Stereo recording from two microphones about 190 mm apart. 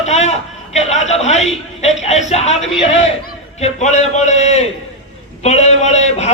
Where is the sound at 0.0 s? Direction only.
35° left (ahead or behind).